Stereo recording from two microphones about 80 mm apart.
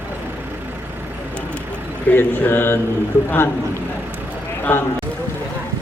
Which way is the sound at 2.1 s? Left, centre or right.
Left.